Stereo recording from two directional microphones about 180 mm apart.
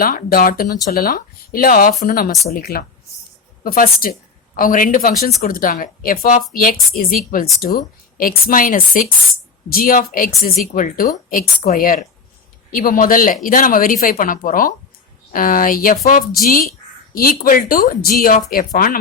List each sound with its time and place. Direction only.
0.0 s a woman's voice: 50° left (ahead or behind)